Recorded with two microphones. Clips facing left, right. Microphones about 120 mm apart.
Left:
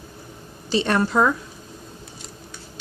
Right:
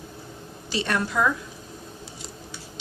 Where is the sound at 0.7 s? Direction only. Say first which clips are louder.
Left 6 dB; 30° left (ahead or behind).